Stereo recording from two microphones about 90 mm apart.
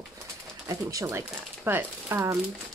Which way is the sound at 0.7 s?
40° right (ahead or behind).